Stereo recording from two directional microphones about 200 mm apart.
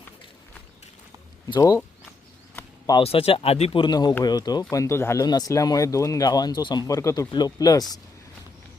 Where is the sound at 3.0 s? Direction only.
30° left (ahead or behind).